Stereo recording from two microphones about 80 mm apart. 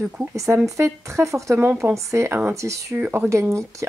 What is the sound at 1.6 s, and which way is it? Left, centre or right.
Speech, right.